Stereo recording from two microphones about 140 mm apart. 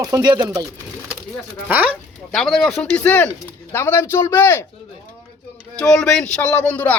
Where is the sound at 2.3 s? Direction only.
5° left (ahead or behind).